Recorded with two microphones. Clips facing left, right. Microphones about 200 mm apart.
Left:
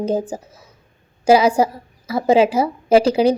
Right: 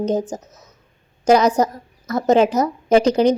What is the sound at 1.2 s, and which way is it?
A woman's voice, 10° left (ahead or behind).